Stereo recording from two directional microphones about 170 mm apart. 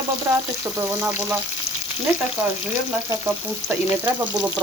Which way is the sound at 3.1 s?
15° right (ahead or behind).